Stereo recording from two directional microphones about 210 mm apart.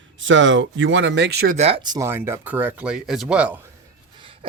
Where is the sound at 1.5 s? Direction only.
30° right (ahead or behind); by 3.6 s 5° right (ahead or behind).